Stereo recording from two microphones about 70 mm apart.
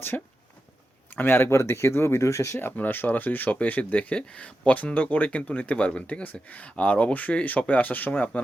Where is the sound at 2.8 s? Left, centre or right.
Left.